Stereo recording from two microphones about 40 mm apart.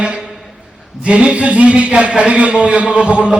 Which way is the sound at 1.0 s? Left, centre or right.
Right.